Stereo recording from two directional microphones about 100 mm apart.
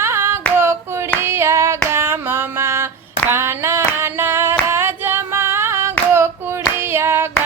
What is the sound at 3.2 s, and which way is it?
Female singing, 25° right (ahead or behind).